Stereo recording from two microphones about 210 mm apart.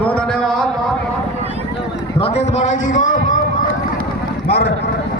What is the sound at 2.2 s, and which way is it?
A man's voice, 30° left (ahead or behind).